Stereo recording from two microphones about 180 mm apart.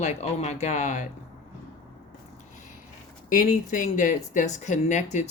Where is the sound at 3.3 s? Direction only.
45° left (ahead or behind).